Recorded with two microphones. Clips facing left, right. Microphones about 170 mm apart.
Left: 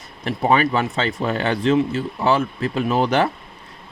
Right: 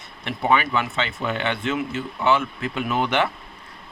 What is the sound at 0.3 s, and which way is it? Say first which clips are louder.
Speech: left 3 dB; 35° left (ahead or behind).